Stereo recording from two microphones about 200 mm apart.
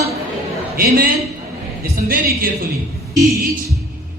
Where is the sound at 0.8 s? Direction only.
45° right (ahead or behind).